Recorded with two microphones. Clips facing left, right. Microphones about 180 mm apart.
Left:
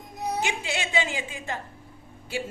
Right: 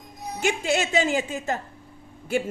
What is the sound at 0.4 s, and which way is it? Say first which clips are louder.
Speech: right 7 dB; 45° right (ahead or behind).